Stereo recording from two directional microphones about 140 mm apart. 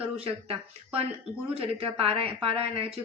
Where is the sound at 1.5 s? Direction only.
45° right (ahead or behind).